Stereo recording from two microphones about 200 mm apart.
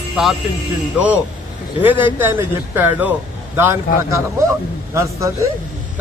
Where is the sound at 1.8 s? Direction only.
10° right (ahead or behind).